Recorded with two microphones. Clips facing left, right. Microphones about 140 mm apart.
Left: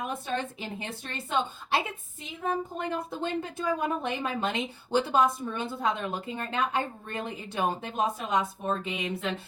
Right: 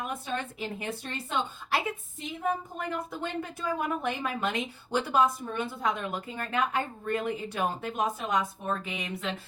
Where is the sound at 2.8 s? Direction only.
25° left (ahead or behind).